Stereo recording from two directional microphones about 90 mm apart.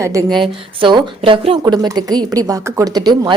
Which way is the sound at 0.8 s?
70° right (ahead or behind).